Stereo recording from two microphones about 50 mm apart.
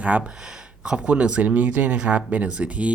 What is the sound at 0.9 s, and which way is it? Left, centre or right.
Speech, centre.